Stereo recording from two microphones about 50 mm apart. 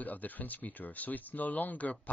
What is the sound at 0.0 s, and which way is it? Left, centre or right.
Speech, left.